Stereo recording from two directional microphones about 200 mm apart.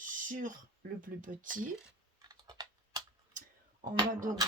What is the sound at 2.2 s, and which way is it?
Typing, 20° right (ahead or behind).